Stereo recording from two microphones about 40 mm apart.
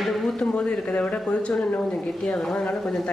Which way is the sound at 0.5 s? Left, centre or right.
Centre.